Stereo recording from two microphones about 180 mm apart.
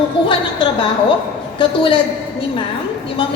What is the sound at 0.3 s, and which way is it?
A woman's voice, 30° left (ahead or behind).